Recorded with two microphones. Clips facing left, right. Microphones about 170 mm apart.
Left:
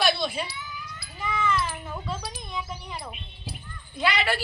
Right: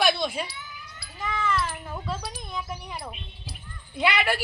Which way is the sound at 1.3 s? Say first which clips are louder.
Left 1 dB; centre (ahead or behind).